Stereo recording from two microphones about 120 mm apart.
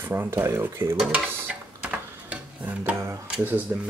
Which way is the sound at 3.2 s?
10° right (ahead or behind).